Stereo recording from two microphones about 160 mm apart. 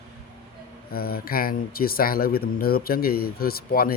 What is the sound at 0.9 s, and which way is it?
Speech, 70° left (ahead or behind).